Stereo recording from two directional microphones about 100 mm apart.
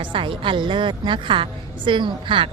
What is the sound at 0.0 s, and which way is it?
A woman's voice, 60° right (ahead or behind).